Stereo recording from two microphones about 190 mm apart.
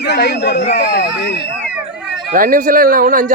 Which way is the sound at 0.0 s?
60° left (ahead or behind).